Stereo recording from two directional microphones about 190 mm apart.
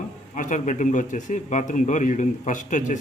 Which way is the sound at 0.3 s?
40° left (ahead or behind).